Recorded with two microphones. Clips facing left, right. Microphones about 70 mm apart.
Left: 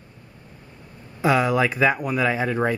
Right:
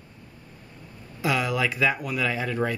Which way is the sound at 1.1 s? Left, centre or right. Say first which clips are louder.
Left 6 dB; left.